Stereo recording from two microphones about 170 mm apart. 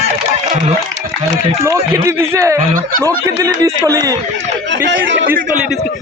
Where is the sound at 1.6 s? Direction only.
15° right (ahead or behind).